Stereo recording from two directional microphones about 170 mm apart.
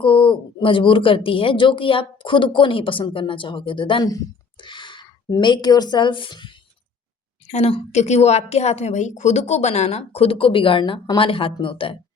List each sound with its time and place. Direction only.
0.0 s speech: 30° left (ahead or behind)
7.4 s a woman's voice: 40° left (ahead or behind)